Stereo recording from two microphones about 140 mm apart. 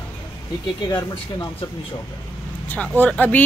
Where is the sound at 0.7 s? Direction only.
30° left (ahead or behind).